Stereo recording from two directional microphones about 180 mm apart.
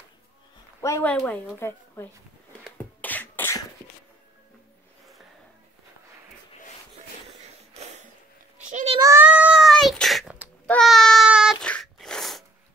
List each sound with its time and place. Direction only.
0.7 s a woman's voice: 15° left (ahead or behind)
2.6 s beatboxing: 10° left (ahead or behind)
7.7 s a sound: 40° right (ahead or behind)
8.9 s a sound: 20° right (ahead or behind)
9.2 s music: 5° right (ahead or behind)
10.7 s child singing: centre (ahead or behind)
11.6 s sneeze: 5° left (ahead or behind)